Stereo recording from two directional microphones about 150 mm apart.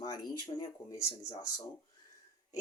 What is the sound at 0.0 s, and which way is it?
Speech, 25° left (ahead or behind).